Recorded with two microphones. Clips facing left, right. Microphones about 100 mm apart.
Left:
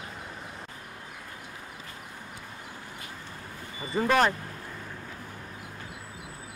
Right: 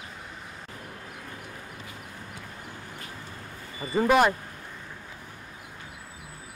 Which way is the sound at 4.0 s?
10° right (ahead or behind).